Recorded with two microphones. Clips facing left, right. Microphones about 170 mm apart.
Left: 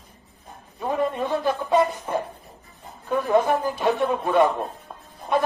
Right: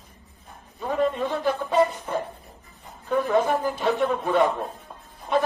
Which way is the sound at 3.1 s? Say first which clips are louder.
Left 1 dB; 15° left (ahead or behind).